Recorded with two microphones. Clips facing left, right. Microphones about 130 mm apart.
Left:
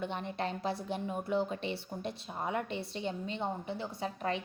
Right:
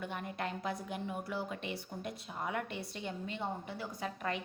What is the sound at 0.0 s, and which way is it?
A woman's voice, 25° left (ahead or behind).